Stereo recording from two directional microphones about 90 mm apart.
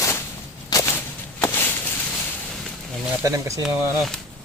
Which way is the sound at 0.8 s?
25° left (ahead or behind).